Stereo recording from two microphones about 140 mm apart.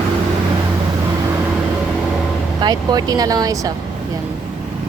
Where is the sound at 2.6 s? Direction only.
30° right (ahead or behind).